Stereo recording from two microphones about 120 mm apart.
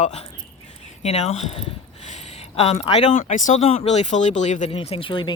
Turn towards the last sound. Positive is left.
turn(degrees=45)  # may be behind; listen again after turning